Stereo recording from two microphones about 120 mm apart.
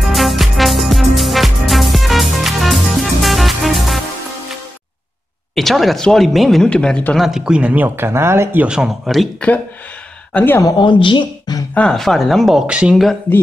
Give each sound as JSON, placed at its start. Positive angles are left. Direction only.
{"t": 0.0, "sound": "music", "side_deg": 0}
{"t": 5.5, "sound": "speech", "side_deg": 0}
{"t": 7.2, "sound": "speech", "side_deg": -5}
{"t": 8.6, "sound": "speech", "side_deg": -5}
{"t": 10.3, "sound": "speech", "side_deg": 15}
{"t": 10.8, "sound": "speech", "side_deg": 45}
{"t": 11.7, "sound": "speech", "side_deg": 5}